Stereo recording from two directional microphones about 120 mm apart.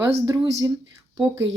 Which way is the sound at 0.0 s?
25° right (ahead or behind).